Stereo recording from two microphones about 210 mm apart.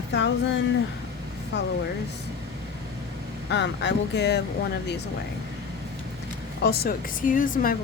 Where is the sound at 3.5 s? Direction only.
55° left (ahead or behind).